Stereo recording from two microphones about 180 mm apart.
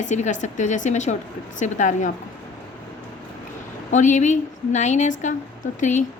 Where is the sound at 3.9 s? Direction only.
45° left (ahead or behind).